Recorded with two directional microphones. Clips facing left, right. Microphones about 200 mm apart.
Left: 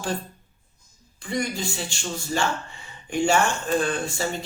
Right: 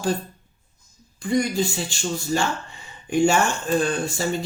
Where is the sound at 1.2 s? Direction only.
40° right (ahead or behind).